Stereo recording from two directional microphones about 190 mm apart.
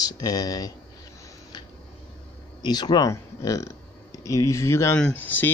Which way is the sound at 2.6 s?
20° left (ahead or behind).